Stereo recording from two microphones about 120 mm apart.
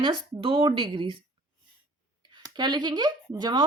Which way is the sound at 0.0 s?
45° right (ahead or behind).